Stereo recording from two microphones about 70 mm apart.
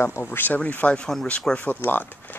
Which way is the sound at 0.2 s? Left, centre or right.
Left.